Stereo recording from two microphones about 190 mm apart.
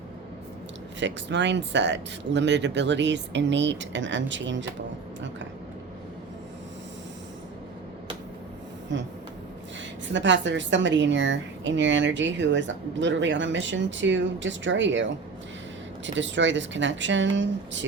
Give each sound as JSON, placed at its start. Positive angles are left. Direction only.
{"t": 0.9, "sound": "a woman's voice", "side_deg": -70}
{"t": 8.9, "sound": "a woman's voice", "side_deg": -70}
{"t": 10.1, "sound": "a woman's voice", "side_deg": -70}
{"t": 16.1, "sound": "a woman's voice", "side_deg": -75}